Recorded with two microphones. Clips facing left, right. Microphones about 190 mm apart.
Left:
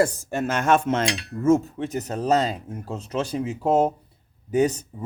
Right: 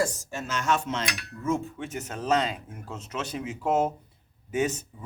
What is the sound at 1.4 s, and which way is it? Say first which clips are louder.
Speech: left 9 dB; 45° left (ahead or behind).